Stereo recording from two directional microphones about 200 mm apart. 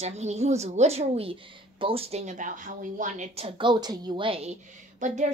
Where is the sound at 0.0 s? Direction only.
35° right (ahead or behind).